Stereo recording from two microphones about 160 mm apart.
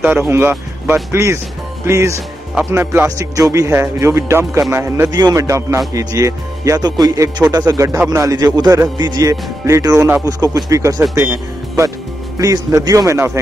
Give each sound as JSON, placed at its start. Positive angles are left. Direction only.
{"t": 0.3, "sound": "speech", "side_deg": -15}
{"t": 2.7, "sound": "music", "side_deg": -15}